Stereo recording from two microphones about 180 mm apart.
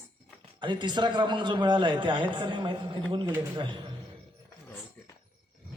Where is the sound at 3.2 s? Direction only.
15° right (ahead or behind).